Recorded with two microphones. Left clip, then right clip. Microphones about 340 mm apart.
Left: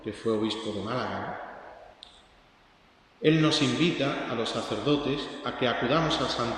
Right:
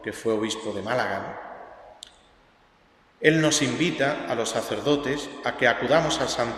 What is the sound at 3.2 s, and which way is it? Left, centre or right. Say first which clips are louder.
A man's voice: right 3 dB; right.